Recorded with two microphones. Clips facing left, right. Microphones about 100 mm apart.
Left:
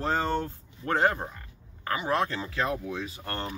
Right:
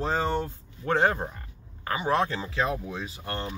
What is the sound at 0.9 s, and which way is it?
Speech, 20° right (ahead or behind).